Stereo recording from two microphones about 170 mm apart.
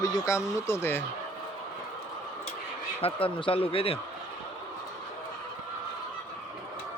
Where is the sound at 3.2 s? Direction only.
30° left (ahead or behind).